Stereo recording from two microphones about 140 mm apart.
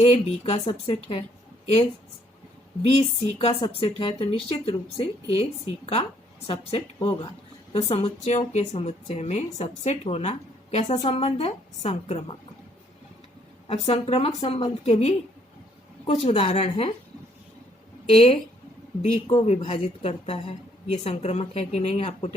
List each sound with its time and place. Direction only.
0.0 s a woman's voice: 45° left (ahead or behind)
2.9 s a woman's voice: 40° left (ahead or behind)
13.7 s a woman's voice: 45° left (ahead or behind)
18.1 s a woman's voice: 45° left (ahead or behind)